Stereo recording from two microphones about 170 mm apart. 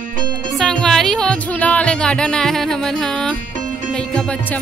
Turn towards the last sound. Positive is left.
turn(degrees=5)  # may be behind; listen again after turning